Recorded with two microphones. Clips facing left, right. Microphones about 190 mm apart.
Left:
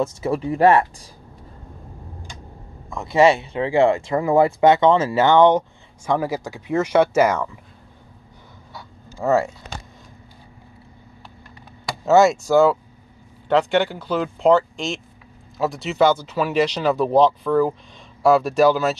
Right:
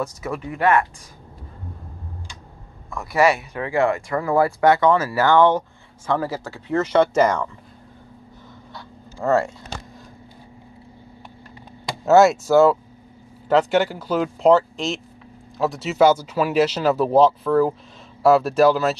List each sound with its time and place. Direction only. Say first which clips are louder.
0.0 s speech: left 5 dB; 30° left (ahead or behind)
2.9 s speech: left 3 dB; 25° left (ahead or behind); by 7.5 s 5° left (ahead or behind)
8.7 s a sound: left 1 dB; 5° left (ahead or behind)
12.0 s speech: right 1 dB; 5° right (ahead or behind)